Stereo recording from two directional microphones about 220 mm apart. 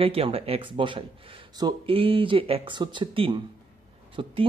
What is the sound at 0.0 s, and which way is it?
A man's voice, 25° right (ahead or behind).